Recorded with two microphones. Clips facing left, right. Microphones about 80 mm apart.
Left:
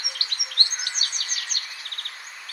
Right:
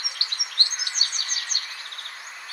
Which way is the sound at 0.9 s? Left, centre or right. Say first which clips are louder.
Even; left.